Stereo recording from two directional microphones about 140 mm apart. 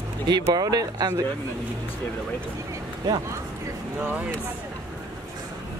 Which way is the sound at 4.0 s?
10° right (ahead or behind).